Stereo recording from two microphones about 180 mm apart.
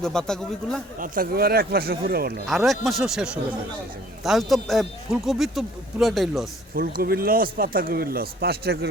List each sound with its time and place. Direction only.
0.0 s speech: 5° left (ahead or behind)
0.9 s speech: 50° right (ahead or behind)
2.5 s speech: centre (ahead or behind)
6.7 s speech: 55° right (ahead or behind)